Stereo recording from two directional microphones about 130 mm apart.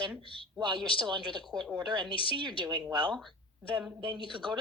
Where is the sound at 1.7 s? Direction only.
35° right (ahead or behind).